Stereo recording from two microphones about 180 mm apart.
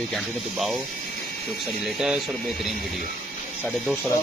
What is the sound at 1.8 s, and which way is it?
Speech, centre (ahead or behind).